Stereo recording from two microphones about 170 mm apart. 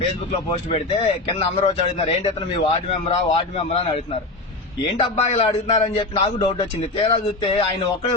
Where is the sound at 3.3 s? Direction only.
40° left (ahead or behind).